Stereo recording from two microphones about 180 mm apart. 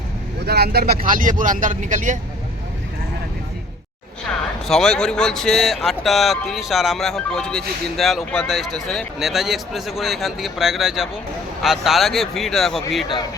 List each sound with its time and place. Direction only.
0.4 s speech: 60° right (ahead or behind); by 2.1 s 45° right (ahead or behind)
4.7 s speech: 5° left (ahead or behind)